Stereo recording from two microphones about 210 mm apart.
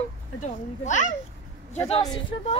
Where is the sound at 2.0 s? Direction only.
20° left (ahead or behind).